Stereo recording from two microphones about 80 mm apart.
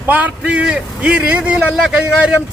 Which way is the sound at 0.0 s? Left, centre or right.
Right.